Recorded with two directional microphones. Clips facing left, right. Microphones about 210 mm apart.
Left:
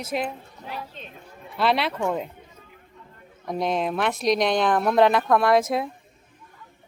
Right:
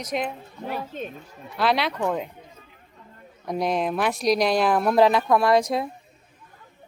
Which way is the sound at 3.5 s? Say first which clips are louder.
Right 1 dB; centre (ahead or behind).